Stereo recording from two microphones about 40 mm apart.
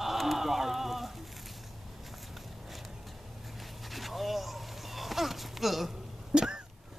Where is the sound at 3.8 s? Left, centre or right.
Centre.